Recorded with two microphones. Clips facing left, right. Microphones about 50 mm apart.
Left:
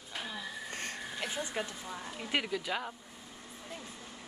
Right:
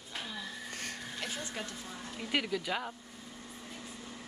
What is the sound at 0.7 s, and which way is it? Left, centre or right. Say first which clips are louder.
Vehicle: left 2 dB; left.